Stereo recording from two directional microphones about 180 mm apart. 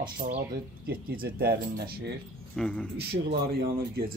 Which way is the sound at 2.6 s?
5° left (ahead or behind).